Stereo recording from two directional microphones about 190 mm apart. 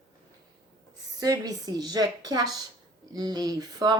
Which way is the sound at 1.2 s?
20° right (ahead or behind).